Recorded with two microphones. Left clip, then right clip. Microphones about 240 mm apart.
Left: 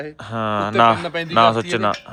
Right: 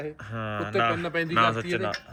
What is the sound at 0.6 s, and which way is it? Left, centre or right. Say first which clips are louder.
Speech: left 10 dB; left.